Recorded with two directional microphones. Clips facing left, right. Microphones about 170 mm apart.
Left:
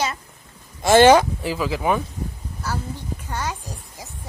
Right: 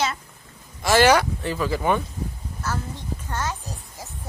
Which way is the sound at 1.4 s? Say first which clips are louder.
Left 1 dB; 5° left (ahead or behind).